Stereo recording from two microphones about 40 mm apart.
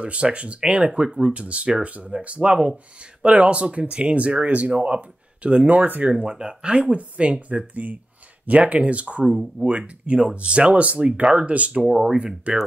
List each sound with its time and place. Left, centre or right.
0.0 s speech: right
1.3 s speech: right
11.9 s speech: centre
12.5 s speech: right